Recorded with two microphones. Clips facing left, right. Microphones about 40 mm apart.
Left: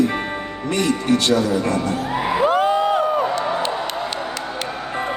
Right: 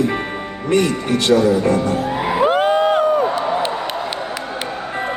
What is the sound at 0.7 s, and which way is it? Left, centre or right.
Speech, right.